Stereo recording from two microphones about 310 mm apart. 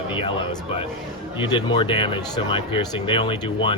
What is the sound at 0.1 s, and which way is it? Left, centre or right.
Speech, centre.